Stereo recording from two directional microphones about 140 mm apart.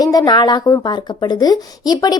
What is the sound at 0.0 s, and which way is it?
A woman's voice, 25° left (ahead or behind).